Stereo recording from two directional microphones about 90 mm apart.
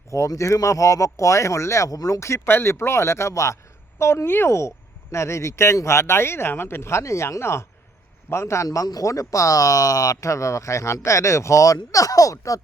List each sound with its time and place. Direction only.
0.1 s speech: 35° left (ahead or behind)